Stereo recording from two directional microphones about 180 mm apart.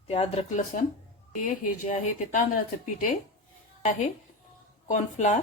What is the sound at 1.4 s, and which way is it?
A woman's voice, 45° left (ahead or behind).